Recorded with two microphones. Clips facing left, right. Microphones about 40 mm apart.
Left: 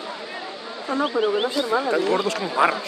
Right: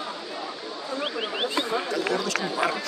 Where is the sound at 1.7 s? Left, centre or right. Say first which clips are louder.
Left 5 dB; left.